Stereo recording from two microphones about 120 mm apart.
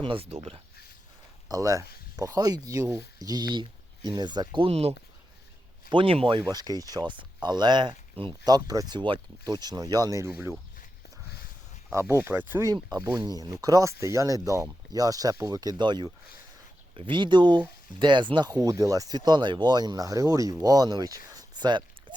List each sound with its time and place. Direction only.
0.0 s speech: 50° right (ahead or behind)
1.5 s speech: 30° right (ahead or behind)
4.7 s speech: 60° right (ahead or behind)
5.9 s speech: 45° right (ahead or behind)
6.4 s speech: 30° right (ahead or behind)
11.9 s speech: 25° right (ahead or behind)
12.6 s speech: 30° right (ahead or behind)